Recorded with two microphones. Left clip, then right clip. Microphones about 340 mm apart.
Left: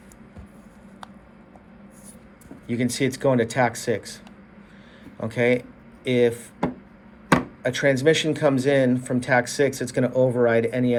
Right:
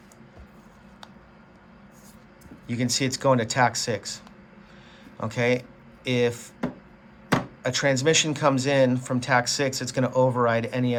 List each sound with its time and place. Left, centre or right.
2.6 s speech: centre
5.2 s speech: centre
7.6 s speech: centre